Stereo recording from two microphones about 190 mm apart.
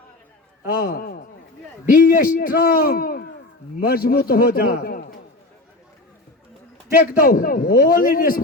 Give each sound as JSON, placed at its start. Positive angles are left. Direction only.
{"t": 0.6, "sound": "a man's voice", "side_deg": 50}
{"t": 7.0, "sound": "a man's voice", "side_deg": 50}